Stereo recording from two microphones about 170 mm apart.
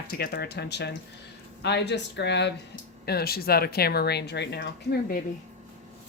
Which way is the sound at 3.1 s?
65° left (ahead or behind).